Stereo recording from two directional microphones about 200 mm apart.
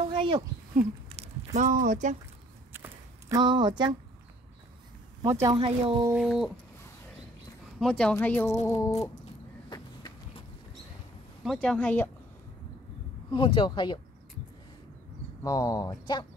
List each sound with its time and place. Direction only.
0.1 s a sound: 25° right (ahead or behind)
2.7 s a sound: 15° right (ahead or behind)
5.3 s speech: 20° right (ahead or behind)
6.1 s speech: centre (ahead or behind)
7.8 s a woman's voice: 5° left (ahead or behind)
8.9 s cat: 35° left (ahead or behind)
9.7 s a sound: 20° left (ahead or behind)
11.4 s speech: centre (ahead or behind)
13.3 s speech: 25° left (ahead or behind)
15.4 s speech: 20° left (ahead or behind)